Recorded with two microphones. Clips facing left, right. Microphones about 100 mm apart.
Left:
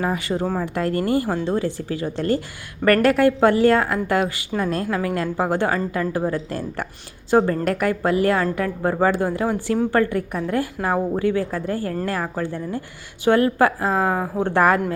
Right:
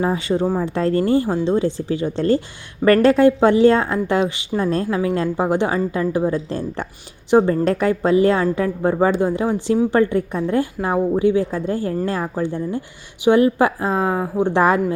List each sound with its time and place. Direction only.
0.0 s a woman's voice: 25° right (ahead or behind)